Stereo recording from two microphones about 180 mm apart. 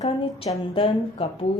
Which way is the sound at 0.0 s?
35° left (ahead or behind).